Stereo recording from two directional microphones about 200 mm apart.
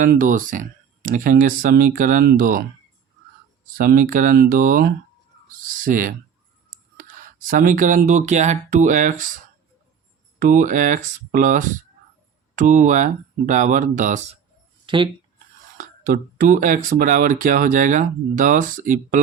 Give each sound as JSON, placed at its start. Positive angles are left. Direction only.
{"t": 0.0, "sound": "speech", "side_deg": -40}
{"t": 3.8, "sound": "speech", "side_deg": -45}
{"t": 7.4, "sound": "speech", "side_deg": -45}
{"t": 10.4, "sound": "speech", "side_deg": -40}
{"t": 14.8, "sound": "speech", "side_deg": -25}
{"t": 15.8, "sound": "speech", "side_deg": -45}